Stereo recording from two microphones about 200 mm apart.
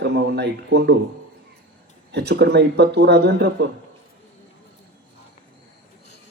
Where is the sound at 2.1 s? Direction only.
55° right (ahead or behind).